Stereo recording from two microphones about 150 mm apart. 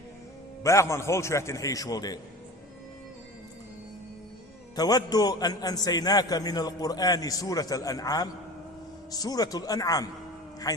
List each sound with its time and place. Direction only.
0.6 s a man's voice: 20° left (ahead or behind)
4.7 s a man's voice: 25° left (ahead or behind)